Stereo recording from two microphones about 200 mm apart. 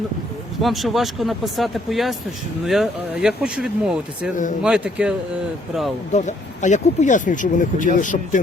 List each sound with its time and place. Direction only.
0.6 s speech: centre (ahead or behind)
6.1 s speech: 35° left (ahead or behind)